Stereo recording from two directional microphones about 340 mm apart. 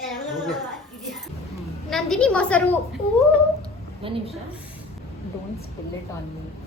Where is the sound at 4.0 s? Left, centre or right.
Centre.